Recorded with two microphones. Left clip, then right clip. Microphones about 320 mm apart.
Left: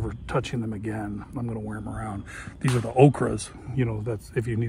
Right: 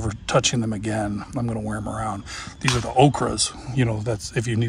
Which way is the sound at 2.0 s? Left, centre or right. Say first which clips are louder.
Right 7 dB; centre.